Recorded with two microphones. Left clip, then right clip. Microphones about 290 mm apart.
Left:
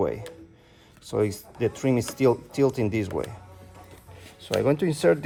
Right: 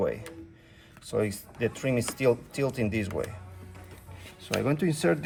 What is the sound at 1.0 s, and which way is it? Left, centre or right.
Speech, centre.